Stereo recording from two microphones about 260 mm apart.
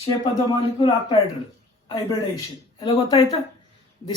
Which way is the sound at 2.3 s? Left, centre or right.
Centre.